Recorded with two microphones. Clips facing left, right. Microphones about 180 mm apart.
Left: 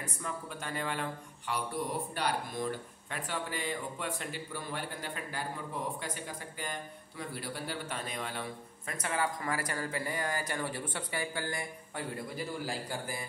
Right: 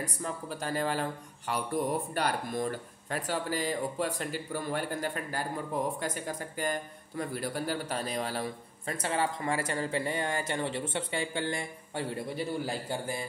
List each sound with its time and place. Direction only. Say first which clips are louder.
0.0 s a man's voice: right 4 dB; 35° right (ahead or behind)